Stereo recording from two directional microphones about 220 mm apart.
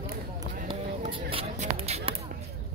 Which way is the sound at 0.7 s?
25° right (ahead or behind).